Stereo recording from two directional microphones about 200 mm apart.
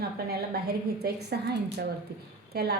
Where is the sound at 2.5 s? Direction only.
50° right (ahead or behind).